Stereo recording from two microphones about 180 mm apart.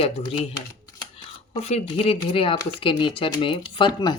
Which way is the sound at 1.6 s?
35° left (ahead or behind).